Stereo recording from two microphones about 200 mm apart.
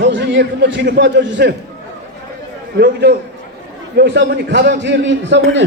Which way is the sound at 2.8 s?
55° right (ahead or behind).